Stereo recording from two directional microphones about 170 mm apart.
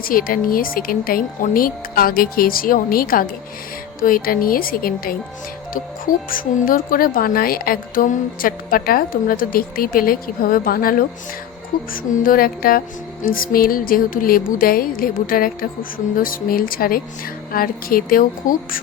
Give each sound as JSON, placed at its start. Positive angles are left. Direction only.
{"t": 0.0, "sound": "a woman's voice", "side_deg": 55}
{"t": 6.3, "sound": "a woman's voice", "side_deg": 55}
{"t": 12.2, "sound": "a woman's voice", "side_deg": 55}